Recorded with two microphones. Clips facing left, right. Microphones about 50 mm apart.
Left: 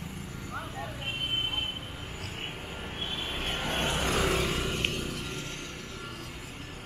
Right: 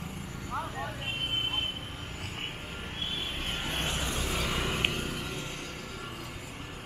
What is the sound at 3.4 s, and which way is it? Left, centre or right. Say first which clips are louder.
Vehicle: left 4 dB; left.